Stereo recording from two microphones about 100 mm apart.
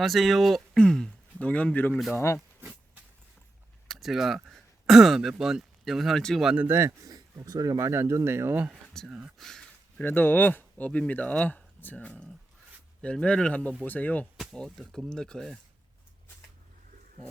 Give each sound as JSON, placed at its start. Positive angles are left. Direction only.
{"t": 0.0, "sound": "speech", "side_deg": 0}
{"t": 2.1, "sound": "speech", "side_deg": 30}
{"t": 3.8, "sound": "a sound", "side_deg": 0}
{"t": 4.4, "sound": "throat clearing", "side_deg": 0}
{"t": 5.4, "sound": "speech", "side_deg": -5}
{"t": 6.4, "sound": "speech", "side_deg": -10}
{"t": 6.7, "sound": "speech", "side_deg": -30}
{"t": 7.9, "sound": "speech", "side_deg": -25}
{"t": 8.7, "sound": "speech", "side_deg": 5}
{"t": 9.0, "sound": "speech", "side_deg": -10}
{"t": 9.4, "sound": "speech", "side_deg": 5}
{"t": 10.0, "sound": "speech", "side_deg": 20}
{"t": 14.3, "sound": "speech", "side_deg": 5}